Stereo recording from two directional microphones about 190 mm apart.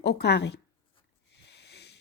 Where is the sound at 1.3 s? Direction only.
60° left (ahead or behind).